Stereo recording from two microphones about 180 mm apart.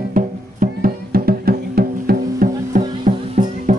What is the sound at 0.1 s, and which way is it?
Music, 50° right (ahead or behind).